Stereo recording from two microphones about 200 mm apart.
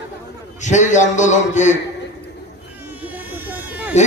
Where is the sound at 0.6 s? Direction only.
35° left (ahead or behind).